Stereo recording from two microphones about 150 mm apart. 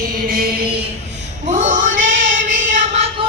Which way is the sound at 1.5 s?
55° right (ahead or behind).